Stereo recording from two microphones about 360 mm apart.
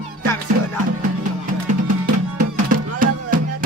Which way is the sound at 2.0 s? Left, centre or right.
Right.